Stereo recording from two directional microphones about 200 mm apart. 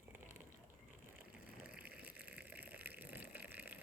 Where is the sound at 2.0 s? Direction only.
10° right (ahead or behind).